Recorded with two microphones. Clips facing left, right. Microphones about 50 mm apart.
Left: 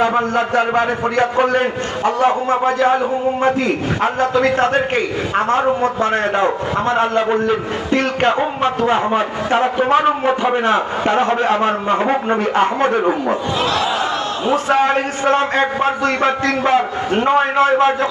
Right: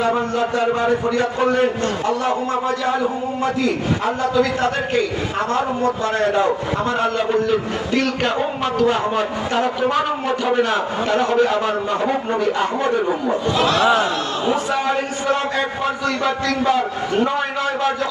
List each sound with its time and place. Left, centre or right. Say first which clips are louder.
0.0 s a man's voice: left 3 dB; left
14.5 s a man's voice: left 7 dB; left